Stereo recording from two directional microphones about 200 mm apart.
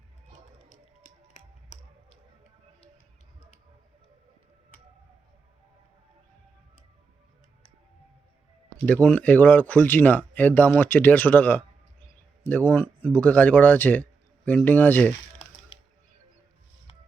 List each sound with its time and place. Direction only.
1.3 s a sound: 35° left (ahead or behind)
8.9 s speech: 10° left (ahead or behind)
15.7 s music: 30° left (ahead or behind)